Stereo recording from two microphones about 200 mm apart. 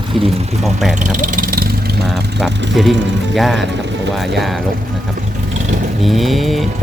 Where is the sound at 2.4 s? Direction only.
Centre (ahead or behind).